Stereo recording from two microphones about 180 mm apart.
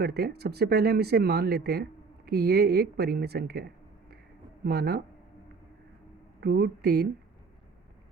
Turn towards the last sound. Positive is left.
turn(degrees=-65)  # may be behind; listen again after turning